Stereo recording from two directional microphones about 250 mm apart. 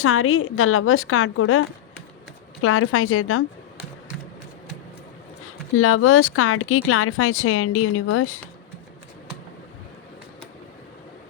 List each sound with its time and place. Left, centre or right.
0.0 s speech: left
5.7 s speech: left